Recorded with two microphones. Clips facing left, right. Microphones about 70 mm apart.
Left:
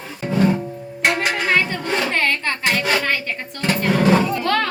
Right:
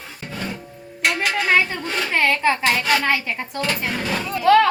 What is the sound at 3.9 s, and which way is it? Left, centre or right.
Speech, left.